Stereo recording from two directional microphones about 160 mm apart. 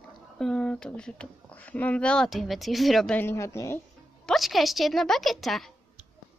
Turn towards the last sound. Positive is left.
turn(degrees=0)  # may be behind; listen again after turning